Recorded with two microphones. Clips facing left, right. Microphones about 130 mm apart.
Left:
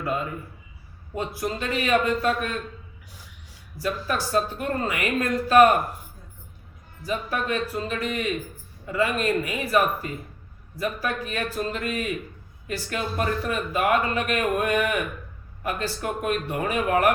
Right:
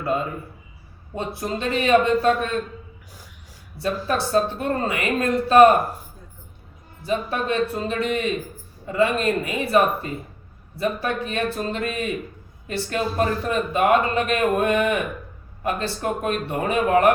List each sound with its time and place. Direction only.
1.1 s speech: 30° right (ahead or behind)
3.8 s speech: 30° right (ahead or behind)
7.0 s speech: 30° right (ahead or behind)